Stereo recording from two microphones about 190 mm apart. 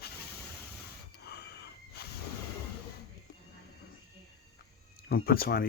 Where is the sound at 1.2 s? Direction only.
60° left (ahead or behind).